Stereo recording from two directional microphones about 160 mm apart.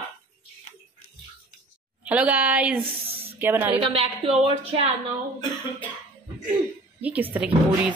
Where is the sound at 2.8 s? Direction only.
35° right (ahead or behind).